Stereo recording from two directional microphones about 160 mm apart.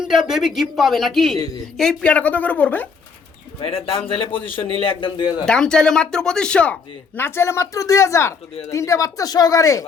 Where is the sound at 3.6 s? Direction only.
35° left (ahead or behind).